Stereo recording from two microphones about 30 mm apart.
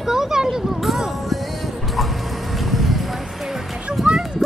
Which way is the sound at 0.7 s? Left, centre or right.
Centre.